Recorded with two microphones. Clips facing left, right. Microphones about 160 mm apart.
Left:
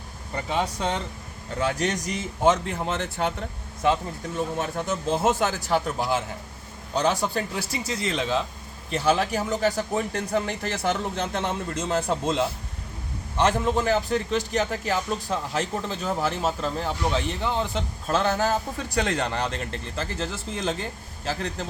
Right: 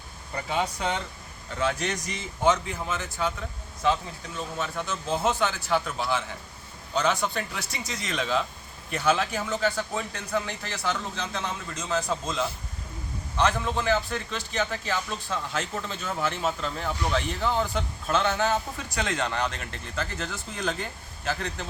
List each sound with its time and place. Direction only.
0.3 s speech: 30° left (ahead or behind)
1.8 s a man's voice: 40° left (ahead or behind); by 3.3 s 60° left (ahead or behind)
3.8 s a man's voice: 50° left (ahead or behind)
13.4 s speech: 45° left (ahead or behind)
17.0 s speech: 20° left (ahead or behind)
18.1 s speech: 35° left (ahead or behind)